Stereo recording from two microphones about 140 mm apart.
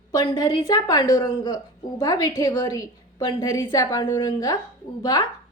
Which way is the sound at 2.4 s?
35° left (ahead or behind).